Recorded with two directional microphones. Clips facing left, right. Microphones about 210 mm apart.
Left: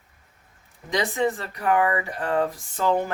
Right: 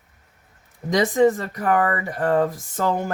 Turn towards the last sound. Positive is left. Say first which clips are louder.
# even
turn(degrees=-45)  # may be behind; listen again after turning